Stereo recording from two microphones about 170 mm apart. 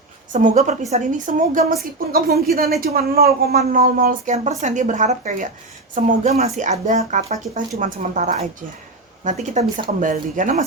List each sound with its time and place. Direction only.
0.3 s a woman's voice: 45° right (ahead or behind)